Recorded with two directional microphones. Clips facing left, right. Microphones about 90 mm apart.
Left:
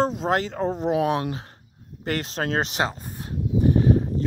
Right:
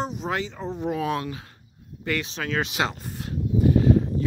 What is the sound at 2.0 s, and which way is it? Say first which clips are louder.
Speech: left 2 dB; 40° left (ahead or behind).